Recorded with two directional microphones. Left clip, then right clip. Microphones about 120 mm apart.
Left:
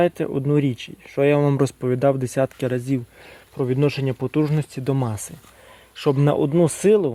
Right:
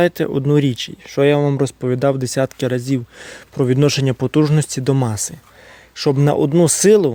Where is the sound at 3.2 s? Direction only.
65° right (ahead or behind).